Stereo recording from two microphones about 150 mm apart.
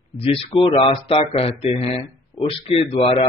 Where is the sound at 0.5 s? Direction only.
35° left (ahead or behind).